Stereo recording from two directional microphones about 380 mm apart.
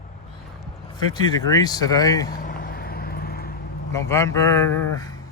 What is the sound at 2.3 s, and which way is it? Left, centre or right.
Vehicle, left.